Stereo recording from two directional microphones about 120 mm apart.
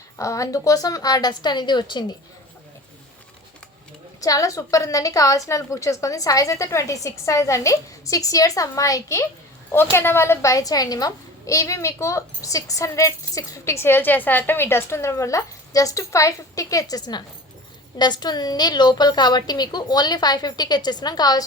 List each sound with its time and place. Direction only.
0.2 s a woman's voice: 25° left (ahead or behind)
4.2 s a child's voice: 30° left (ahead or behind)